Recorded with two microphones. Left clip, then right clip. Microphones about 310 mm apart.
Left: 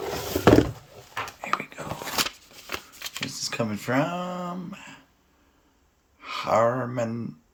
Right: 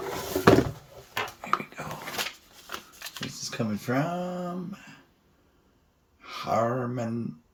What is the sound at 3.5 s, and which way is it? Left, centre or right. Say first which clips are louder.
Speech: left 3 dB; centre.